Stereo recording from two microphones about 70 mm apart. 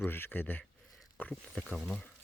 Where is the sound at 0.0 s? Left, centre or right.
Left.